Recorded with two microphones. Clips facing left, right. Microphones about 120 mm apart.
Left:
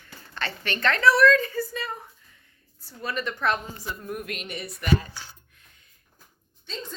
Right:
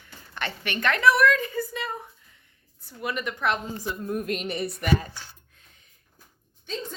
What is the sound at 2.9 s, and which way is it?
A woman's voice, 15° right (ahead or behind).